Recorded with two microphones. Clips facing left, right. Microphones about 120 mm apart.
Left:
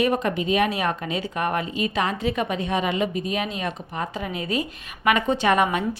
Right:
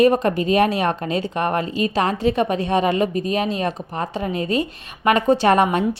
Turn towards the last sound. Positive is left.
turn(degrees=-30)  # may be behind; listen again after turning